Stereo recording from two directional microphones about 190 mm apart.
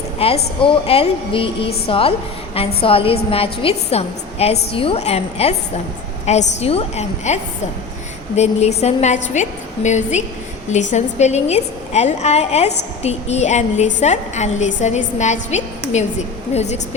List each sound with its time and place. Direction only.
0.2 s a woman's voice: 35° left (ahead or behind)
8.4 s a woman's voice: 35° left (ahead or behind)